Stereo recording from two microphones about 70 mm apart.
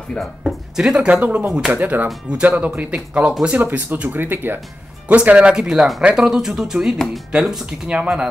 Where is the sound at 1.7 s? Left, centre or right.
Right.